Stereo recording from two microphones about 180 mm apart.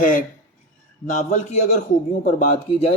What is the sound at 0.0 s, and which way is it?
Speech, 50° left (ahead or behind).